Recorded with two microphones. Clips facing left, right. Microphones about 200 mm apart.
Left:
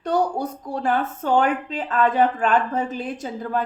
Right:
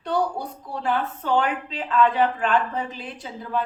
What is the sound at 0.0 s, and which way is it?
Speech, 45° left (ahead or behind).